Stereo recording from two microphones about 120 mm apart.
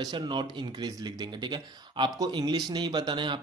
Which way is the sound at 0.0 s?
40° right (ahead or behind).